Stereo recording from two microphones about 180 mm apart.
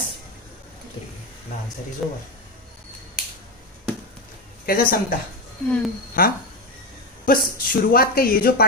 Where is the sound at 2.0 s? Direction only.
Centre (ahead or behind).